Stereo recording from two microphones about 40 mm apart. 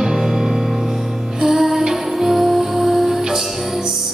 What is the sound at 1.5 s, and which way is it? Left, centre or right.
Music, centre.